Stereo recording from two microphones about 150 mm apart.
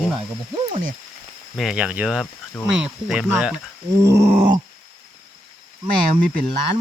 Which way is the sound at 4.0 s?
20° right (ahead or behind).